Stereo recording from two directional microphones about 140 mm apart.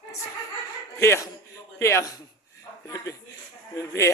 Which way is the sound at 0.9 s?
20° left (ahead or behind).